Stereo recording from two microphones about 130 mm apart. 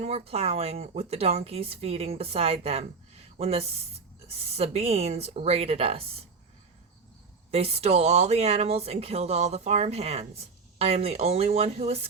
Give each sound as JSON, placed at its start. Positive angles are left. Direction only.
{"t": 0.0, "sound": "speech", "side_deg": -50}
{"t": 7.5, "sound": "speech", "side_deg": -50}